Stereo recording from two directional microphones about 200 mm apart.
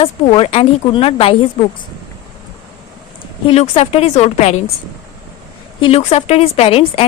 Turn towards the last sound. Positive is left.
turn(degrees=30)  # may be behind; listen again after turning